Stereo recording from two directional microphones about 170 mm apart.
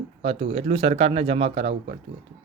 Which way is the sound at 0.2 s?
35° right (ahead or behind).